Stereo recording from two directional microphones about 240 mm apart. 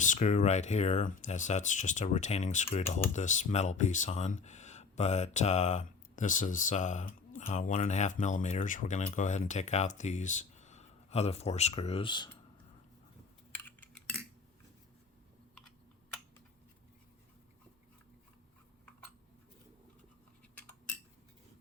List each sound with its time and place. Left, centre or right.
0.0 s speech: left
13.7 s cutlery: centre